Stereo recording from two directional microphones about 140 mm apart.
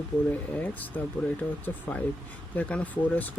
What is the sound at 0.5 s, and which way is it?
Speech, 10° left (ahead or behind).